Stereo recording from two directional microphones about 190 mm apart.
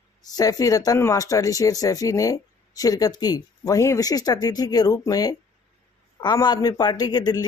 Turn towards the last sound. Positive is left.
turn(degrees=20)  # may be behind; listen again after turning